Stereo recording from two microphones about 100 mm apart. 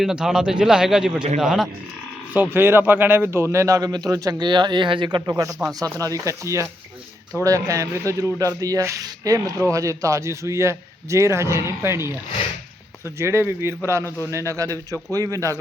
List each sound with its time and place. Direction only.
0.0 s a man's voice: 5° right (ahead or behind)
2.3 s speech: 20° right (ahead or behind); by 5.2 s 55° right (ahead or behind)
5.2 s speech: 35° right (ahead or behind)
13.1 s speech: 25° right (ahead or behind)